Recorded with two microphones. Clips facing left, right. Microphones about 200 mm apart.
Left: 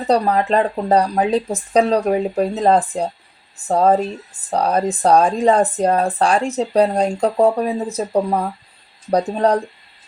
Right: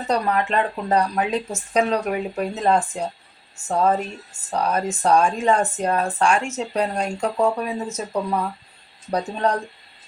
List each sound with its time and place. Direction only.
0.1 s speech: 35° left (ahead or behind)